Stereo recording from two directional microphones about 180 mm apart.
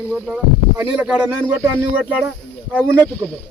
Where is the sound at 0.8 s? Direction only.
10° right (ahead or behind).